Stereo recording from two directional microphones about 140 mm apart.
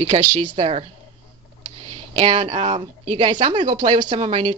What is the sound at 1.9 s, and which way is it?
A woman's voice, 45° right (ahead or behind).